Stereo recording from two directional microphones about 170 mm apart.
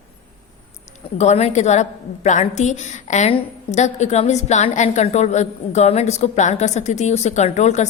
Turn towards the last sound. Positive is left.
turn(degrees=40)  # may be behind; listen again after turning